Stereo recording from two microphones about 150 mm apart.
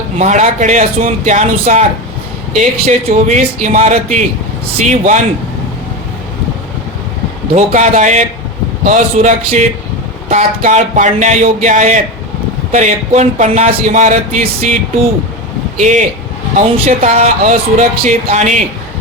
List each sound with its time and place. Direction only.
0.2 s speech: 55° right (ahead or behind)
7.5 s speech: 55° right (ahead or behind)
15.8 s speech: 55° right (ahead or behind)